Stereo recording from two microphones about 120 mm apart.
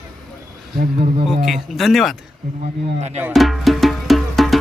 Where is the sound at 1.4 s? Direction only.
Centre (ahead or behind).